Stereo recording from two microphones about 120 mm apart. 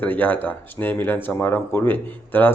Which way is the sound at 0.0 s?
15° left (ahead or behind).